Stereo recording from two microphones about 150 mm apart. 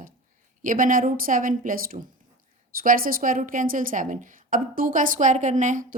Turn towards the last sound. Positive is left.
turn(degrees=-60)  # may be behind; listen again after turning